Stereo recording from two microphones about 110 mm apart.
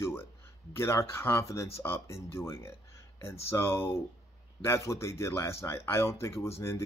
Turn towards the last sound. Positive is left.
turn(degrees=25)  # may be behind; listen again after turning